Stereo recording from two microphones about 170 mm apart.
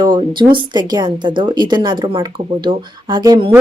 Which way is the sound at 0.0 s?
25° right (ahead or behind).